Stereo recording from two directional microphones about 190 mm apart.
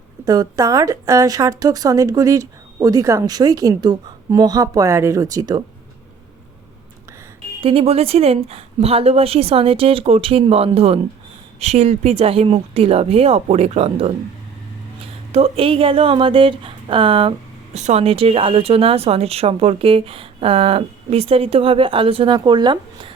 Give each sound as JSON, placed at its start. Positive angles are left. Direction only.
{"t": 0.3, "sound": "a woman's voice", "side_deg": -20}
{"t": 7.6, "sound": "a woman's voice", "side_deg": -30}
{"t": 15.3, "sound": "speech", "side_deg": -30}